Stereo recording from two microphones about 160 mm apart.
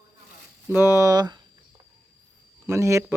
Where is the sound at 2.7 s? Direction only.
20° right (ahead or behind).